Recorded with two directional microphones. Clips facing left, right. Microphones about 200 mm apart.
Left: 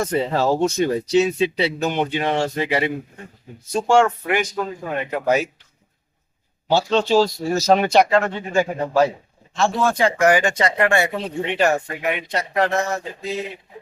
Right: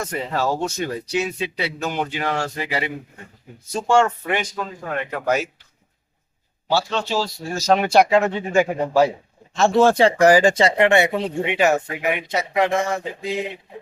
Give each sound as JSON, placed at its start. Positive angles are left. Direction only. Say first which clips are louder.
{"t": 0.0, "sound": "speech", "louder": "left 4 dB", "side_deg": 30}
{"t": 3.8, "sound": "speech", "louder": "left 1 dB", "side_deg": 10}
{"t": 6.7, "sound": "speech", "louder": "left 4 dB", "side_deg": 20}
{"t": 8.3, "sound": "speech", "louder": "right 2 dB", "side_deg": -10}
{"t": 9.6, "sound": "speech", "louder": "right 5 dB", "side_deg": -25}
{"t": 10.0, "sound": "speech", "louder": "right 3 dB", "side_deg": -35}
{"t": 11.6, "sound": "speech", "louder": "right 1 dB", "side_deg": -5}